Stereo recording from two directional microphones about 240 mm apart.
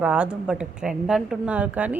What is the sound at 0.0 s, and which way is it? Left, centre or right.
A woman's voice, centre.